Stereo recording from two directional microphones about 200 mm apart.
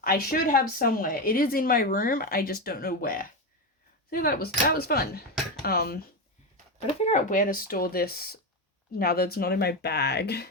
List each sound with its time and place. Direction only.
0.0 s speech: 45° left (ahead or behind)
7.0 s speech: 35° left (ahead or behind); by 10.5 s 55° left (ahead or behind)